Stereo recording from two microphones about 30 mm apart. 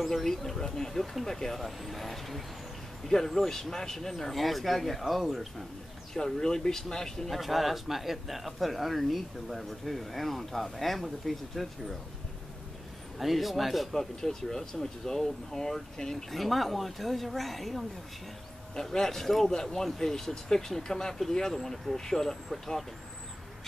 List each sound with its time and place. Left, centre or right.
0.1 s speech: centre
1.6 s speech: centre
3.1 s speech: centre
6.1 s speech: centre
7.2 s speech: centre
13.2 s speech: centre
13.9 s speech: centre
16.3 s speech: centre
18.8 s speech: centre